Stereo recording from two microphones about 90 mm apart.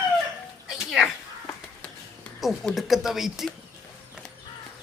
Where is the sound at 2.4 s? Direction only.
Centre (ahead or behind).